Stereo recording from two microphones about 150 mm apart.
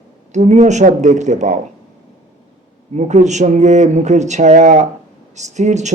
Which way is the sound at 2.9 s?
50° right (ahead or behind).